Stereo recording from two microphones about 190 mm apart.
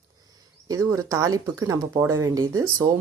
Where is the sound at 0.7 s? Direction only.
15° right (ahead or behind).